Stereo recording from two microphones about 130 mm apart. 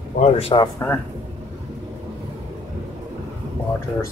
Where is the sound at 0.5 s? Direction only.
40° left (ahead or behind).